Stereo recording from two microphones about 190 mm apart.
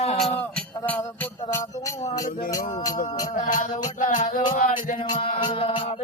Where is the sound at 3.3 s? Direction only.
45° left (ahead or behind).